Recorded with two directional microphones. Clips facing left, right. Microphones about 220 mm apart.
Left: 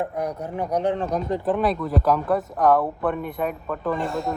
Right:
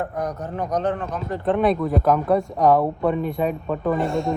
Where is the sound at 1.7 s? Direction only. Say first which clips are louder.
Right 2 dB; 45° right (ahead or behind).